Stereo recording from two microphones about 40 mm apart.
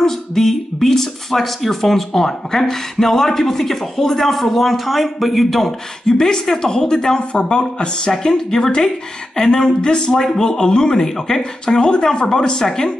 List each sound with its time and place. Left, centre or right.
0.0 s speech: centre